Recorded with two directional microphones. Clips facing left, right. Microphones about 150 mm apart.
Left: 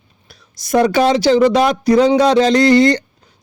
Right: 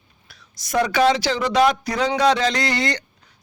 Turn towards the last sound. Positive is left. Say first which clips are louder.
# left 13 dB
turn(degrees=35)  # may be behind; listen again after turning